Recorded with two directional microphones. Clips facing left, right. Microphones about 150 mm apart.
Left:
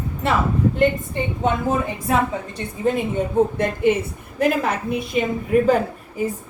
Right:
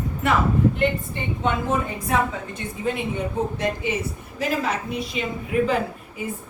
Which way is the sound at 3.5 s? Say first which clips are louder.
Left 6 dB; 55° left (ahead or behind).